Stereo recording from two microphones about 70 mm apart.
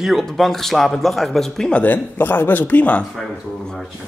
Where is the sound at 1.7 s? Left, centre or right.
Left.